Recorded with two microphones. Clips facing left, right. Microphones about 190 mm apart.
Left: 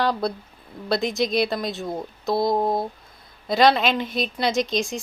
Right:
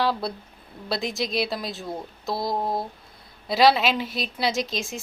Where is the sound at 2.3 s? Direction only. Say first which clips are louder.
Left 5 dB; 25° left (ahead or behind).